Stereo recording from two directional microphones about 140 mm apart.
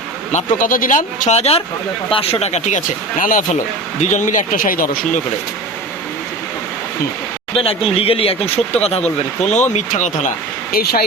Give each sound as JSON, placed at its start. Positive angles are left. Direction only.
{"t": 0.3, "sound": "speech", "side_deg": 65}
{"t": 4.0, "sound": "speech", "side_deg": 60}
{"t": 7.5, "sound": "speech", "side_deg": 40}